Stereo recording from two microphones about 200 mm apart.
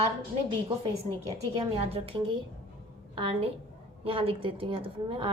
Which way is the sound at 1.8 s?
30° right (ahead or behind).